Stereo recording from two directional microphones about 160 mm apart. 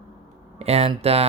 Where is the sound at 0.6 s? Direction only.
40° right (ahead or behind).